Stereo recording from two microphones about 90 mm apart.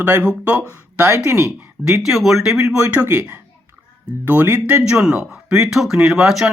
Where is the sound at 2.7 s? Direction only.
15° right (ahead or behind).